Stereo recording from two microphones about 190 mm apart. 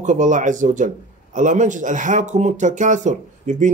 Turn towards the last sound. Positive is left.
turn(degrees=-40)  # may be behind; listen again after turning